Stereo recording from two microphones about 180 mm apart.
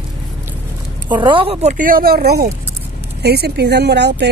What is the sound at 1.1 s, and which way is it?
Speech, 25° right (ahead or behind).